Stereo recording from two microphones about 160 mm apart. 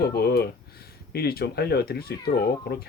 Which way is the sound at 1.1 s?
80° left.